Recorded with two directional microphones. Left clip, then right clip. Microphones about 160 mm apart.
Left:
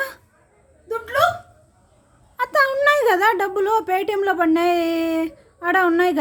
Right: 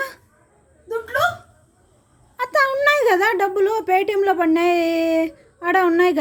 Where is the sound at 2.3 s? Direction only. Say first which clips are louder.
Even; centre (ahead or behind).